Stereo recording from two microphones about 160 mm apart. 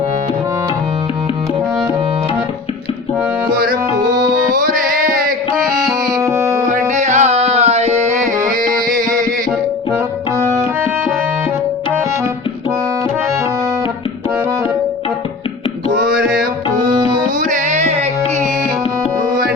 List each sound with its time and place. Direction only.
6.1 s music: 20° right (ahead or behind)
6.7 s music: 45° right (ahead or behind)
8.6 s music: 60° right (ahead or behind)
17.5 s music: 45° right (ahead or behind)